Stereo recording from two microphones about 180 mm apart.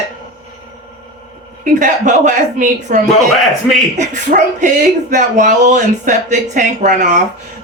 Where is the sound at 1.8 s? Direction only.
45° right (ahead or behind).